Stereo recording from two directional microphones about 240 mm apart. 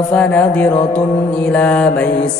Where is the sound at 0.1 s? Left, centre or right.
Centre.